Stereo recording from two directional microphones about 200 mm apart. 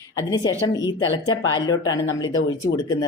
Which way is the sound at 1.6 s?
20° left (ahead or behind).